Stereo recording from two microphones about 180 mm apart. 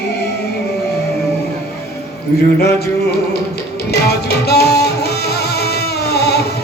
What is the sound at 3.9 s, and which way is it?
Music, 65° left (ahead or behind).